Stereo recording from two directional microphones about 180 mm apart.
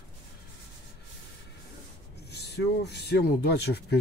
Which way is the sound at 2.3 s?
65° left (ahead or behind).